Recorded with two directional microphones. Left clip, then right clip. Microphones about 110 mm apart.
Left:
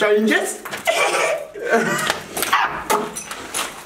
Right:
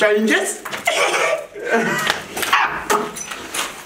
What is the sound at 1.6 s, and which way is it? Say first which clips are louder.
Speech: even; 50° left (ahead or behind).